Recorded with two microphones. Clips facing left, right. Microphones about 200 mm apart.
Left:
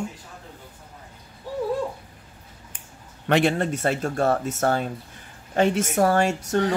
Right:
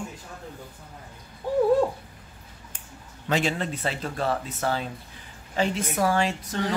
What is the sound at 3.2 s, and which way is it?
A woman's voice, 60° left (ahead or behind).